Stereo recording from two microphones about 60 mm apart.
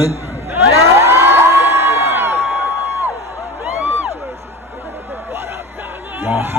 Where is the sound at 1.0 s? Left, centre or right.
Right.